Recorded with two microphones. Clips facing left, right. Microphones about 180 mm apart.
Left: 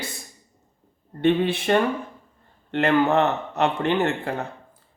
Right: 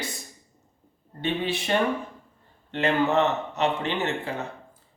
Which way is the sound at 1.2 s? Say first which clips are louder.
Left 7 dB; 55° left (ahead or behind).